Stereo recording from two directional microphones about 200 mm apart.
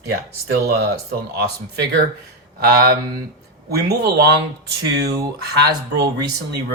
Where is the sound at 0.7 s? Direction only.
55° right (ahead or behind).